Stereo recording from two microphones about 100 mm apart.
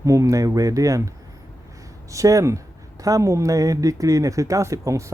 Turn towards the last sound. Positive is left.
turn(degrees=-30)  # may be behind; listen again after turning